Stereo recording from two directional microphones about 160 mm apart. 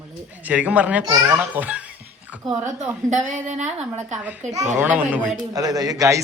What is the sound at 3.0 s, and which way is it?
A woman's voice, 55° right (ahead or behind).